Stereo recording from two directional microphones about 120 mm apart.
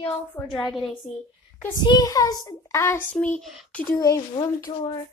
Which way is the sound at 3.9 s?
35° left (ahead or behind).